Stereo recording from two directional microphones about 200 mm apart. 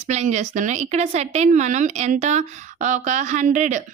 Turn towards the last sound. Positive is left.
turn(degrees=-40)  # may be behind; listen again after turning